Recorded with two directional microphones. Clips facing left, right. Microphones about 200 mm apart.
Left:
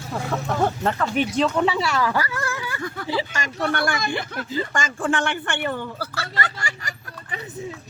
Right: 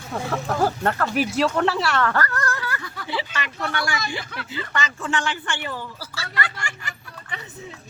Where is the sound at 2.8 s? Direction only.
45° left (ahead or behind).